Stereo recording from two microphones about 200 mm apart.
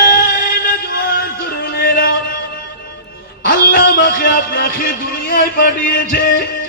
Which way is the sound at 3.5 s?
45° left (ahead or behind).